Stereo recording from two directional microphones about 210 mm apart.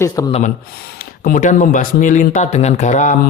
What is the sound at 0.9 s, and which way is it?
Speech, 40° left (ahead or behind).